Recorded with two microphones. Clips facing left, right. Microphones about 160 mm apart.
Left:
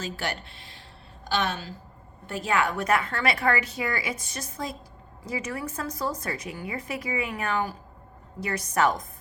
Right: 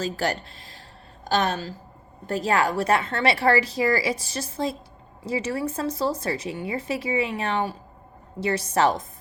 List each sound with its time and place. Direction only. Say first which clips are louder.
0.0 s a woman's voice: right 6 dB; 40° right (ahead or behind)